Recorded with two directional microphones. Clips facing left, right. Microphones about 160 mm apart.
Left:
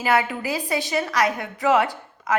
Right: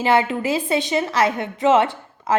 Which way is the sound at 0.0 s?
25° right (ahead or behind).